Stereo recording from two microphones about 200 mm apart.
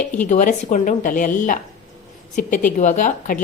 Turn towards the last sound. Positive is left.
turn(degrees=40)  # may be behind; listen again after turning